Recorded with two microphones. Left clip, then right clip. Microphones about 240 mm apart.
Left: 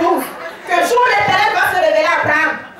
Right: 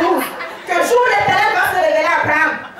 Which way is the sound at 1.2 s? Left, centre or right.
Centre.